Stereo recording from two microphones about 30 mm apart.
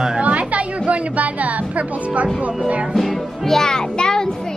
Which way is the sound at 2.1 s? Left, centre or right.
Right.